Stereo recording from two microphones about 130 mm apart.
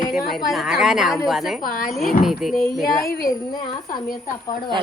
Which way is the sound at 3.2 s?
35° left (ahead or behind).